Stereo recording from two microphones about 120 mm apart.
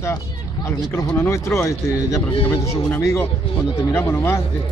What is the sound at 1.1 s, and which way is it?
A man's voice, 20° left (ahead or behind).